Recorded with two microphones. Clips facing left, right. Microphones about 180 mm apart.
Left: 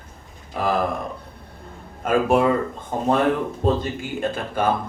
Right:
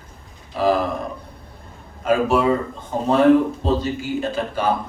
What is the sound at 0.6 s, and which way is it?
Speech, 50° left (ahead or behind).